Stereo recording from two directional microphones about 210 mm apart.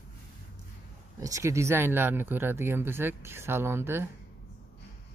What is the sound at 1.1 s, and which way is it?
Speech, 15° right (ahead or behind).